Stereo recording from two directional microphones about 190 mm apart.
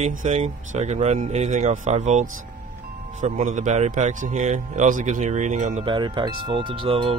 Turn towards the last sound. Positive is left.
turn(degrees=-30)  # may be behind; listen again after turning